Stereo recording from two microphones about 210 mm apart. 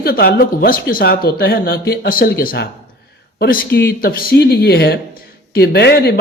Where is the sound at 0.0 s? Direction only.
45° left (ahead or behind).